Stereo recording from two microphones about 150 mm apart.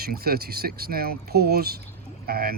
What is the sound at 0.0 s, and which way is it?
Speech, 90° right.